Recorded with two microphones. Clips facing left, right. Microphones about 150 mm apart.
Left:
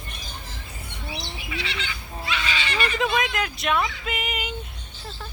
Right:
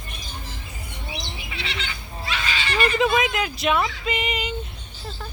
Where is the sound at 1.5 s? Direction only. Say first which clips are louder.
Left 2 dB; 30° right (ahead or behind).